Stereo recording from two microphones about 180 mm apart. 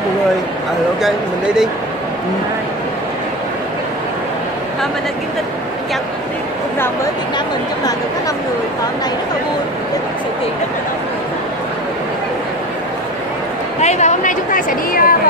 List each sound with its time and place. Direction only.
1.0 s speech: 5° right (ahead or behind)
13.7 s a woman's voice: 40° left (ahead or behind)